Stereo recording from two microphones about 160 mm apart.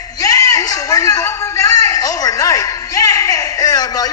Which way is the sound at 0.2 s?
20° left (ahead or behind).